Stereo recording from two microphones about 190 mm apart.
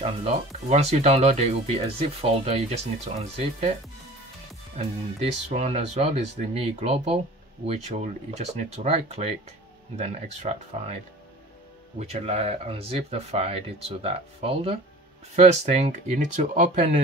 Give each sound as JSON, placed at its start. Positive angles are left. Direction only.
{"t": 0.0, "sound": "speech", "side_deg": -35}
{"t": 4.7, "sound": "speech", "side_deg": -30}
{"t": 12.0, "sound": "speech", "side_deg": -35}